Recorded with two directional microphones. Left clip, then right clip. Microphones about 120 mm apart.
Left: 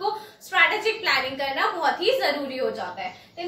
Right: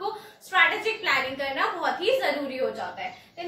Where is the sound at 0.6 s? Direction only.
25° left (ahead or behind).